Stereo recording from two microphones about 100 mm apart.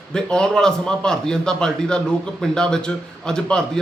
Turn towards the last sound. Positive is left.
turn(degrees=10)  # may be behind; listen again after turning